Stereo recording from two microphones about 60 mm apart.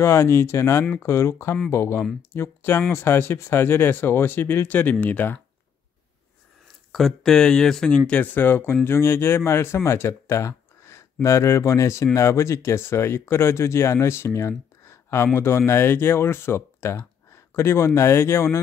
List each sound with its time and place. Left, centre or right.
0.0 s speech: left
6.9 s speech: centre
8.1 s speech: left
14.9 s a sound: left
15.3 s speech: left